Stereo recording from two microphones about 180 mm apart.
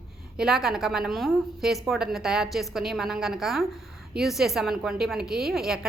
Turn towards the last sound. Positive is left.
turn(degrees=0)  # may be behind; listen again after turning